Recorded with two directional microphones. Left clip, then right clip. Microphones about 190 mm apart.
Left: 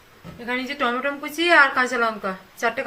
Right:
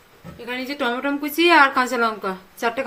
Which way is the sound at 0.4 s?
55° right (ahead or behind).